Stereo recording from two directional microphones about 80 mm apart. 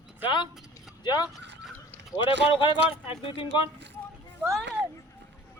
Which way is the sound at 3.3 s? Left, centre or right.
Left.